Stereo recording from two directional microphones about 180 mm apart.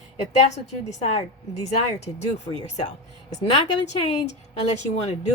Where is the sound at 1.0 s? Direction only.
40° left (ahead or behind).